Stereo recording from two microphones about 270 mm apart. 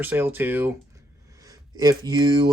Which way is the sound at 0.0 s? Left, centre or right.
Centre.